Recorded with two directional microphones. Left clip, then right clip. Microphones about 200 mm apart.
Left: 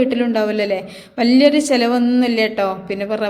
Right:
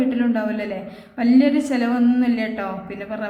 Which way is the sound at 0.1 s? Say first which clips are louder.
Left 5 dB; 35° left (ahead or behind).